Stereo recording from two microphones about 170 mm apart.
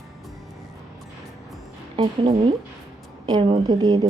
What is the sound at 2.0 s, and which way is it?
Speech, 35° right (ahead or behind).